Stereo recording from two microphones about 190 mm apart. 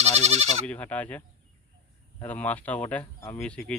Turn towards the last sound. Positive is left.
turn(degrees=5)  # may be behind; listen again after turning